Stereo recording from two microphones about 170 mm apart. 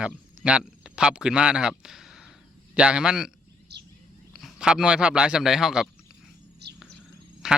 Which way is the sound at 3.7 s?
75° right (ahead or behind).